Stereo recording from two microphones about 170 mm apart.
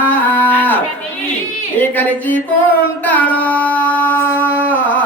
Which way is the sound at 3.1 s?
10° left (ahead or behind).